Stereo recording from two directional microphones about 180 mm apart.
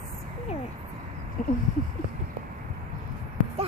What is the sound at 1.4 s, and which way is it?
Speech, 45° left (ahead or behind).